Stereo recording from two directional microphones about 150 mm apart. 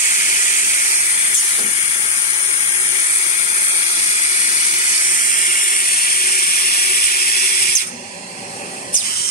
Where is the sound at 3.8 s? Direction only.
45° left (ahead or behind); by 7.7 s 85° left.